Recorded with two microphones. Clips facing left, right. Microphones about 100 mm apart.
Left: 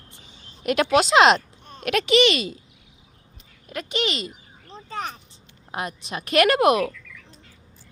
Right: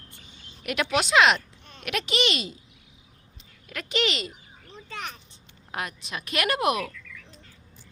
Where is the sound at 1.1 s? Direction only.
35° left (ahead or behind).